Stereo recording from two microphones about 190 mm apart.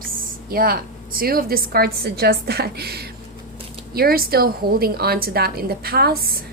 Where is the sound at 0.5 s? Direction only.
50° right (ahead or behind).